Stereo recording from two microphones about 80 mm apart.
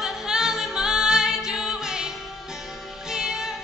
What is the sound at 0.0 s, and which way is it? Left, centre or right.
A capella, centre.